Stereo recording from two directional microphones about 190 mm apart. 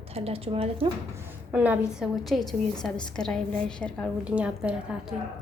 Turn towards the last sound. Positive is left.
turn(degrees=-5)  # may be behind; listen again after turning